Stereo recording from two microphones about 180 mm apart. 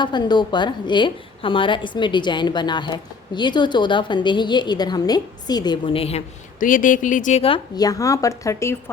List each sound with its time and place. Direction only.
0.0 s a woman's voice: 25° left (ahead or behind)
6.6 s a woman's voice: 50° left (ahead or behind); by 8.8 s 15° left (ahead or behind)